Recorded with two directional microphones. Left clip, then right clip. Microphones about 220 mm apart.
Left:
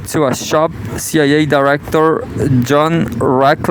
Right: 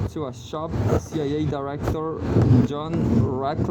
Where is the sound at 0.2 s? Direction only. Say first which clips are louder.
Left 19 dB; 45° left (ahead or behind).